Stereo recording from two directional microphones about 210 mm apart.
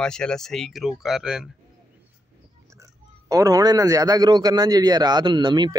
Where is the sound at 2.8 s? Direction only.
15° right (ahead or behind).